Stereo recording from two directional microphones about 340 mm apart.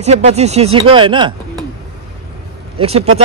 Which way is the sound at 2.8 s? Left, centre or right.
Centre.